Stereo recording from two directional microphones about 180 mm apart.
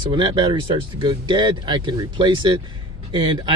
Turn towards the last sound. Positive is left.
turn(degrees=-25)  # may be behind; listen again after turning